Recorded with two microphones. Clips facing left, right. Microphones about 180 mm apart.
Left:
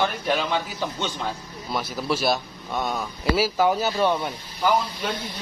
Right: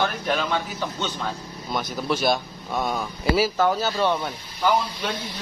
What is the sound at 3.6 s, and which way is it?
Speech, 10° left (ahead or behind).